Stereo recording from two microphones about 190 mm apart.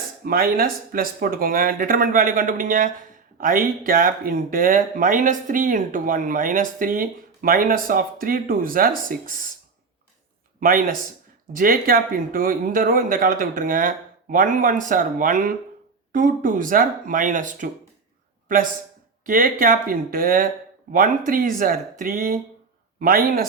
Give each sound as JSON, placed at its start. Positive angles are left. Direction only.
{"t": 0.3, "sound": "speech", "side_deg": -50}
{"t": 10.6, "sound": "speech", "side_deg": -50}
{"t": 19.2, "sound": "speech", "side_deg": -45}